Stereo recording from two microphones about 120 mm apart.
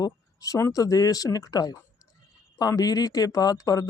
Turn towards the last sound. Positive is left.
turn(degrees=30)  # may be behind; listen again after turning